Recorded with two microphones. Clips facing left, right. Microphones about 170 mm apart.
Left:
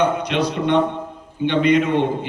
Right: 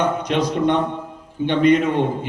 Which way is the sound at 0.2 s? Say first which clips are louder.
Right 1 dB; 45° right (ahead or behind).